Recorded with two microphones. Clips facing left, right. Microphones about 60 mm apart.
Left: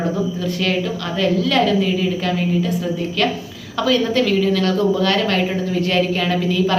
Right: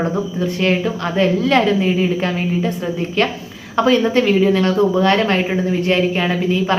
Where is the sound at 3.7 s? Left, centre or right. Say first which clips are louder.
Right 3 dB; right.